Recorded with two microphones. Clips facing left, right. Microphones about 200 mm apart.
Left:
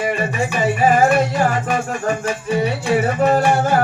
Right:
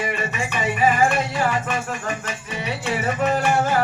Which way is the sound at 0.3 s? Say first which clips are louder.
Left 5 dB; 40° left (ahead or behind).